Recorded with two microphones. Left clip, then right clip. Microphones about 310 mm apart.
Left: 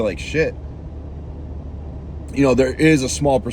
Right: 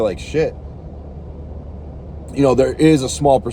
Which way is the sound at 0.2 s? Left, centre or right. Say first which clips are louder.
Right 1 dB; right.